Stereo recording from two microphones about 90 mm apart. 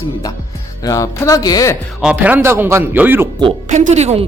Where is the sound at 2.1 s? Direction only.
20° right (ahead or behind).